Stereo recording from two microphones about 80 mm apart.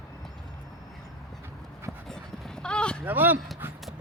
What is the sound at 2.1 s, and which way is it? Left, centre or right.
Livestock, centre.